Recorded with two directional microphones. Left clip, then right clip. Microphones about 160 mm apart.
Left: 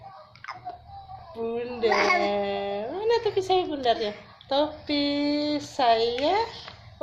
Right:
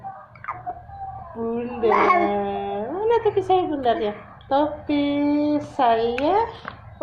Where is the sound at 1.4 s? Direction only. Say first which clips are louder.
Right 4 dB; 25° left (ahead or behind).